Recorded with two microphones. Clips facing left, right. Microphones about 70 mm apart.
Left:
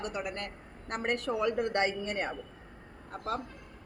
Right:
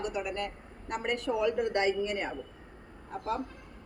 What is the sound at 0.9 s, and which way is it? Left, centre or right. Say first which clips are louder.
Speech: even; left.